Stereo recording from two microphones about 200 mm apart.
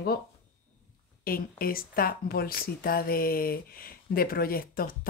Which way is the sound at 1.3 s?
50° left (ahead or behind).